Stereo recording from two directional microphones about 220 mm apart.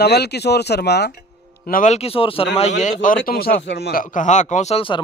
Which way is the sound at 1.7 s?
35° left (ahead or behind).